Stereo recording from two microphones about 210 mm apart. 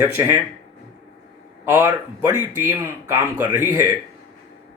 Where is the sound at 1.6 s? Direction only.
10° right (ahead or behind).